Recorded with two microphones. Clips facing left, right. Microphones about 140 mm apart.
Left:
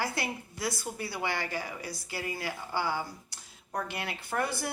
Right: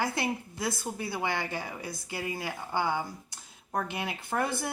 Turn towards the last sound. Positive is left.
turn(degrees=-20)  # may be behind; listen again after turning